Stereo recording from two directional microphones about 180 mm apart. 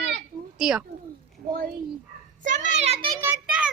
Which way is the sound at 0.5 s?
5° right (ahead or behind).